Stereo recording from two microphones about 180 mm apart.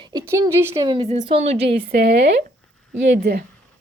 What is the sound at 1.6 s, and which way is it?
A woman's voice, 65° right (ahead or behind).